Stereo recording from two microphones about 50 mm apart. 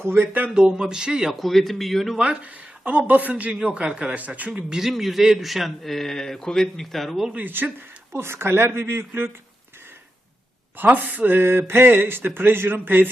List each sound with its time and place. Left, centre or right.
0.0 s speech: right
0.5 s a man's voice: centre
1.3 s a man's voice: centre
2.1 s speech: right
3.5 s a man's voice: centre
4.1 s speech: right
4.5 s a man's voice: centre
7.3 s speech: right
8.1 s speech: right
10.8 s speech: right